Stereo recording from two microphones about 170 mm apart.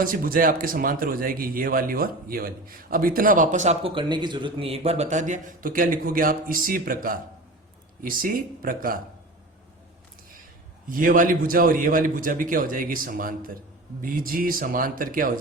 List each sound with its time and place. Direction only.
0.0 s a man's voice: 55° right (ahead or behind)
10.8 s a man's voice: 55° right (ahead or behind)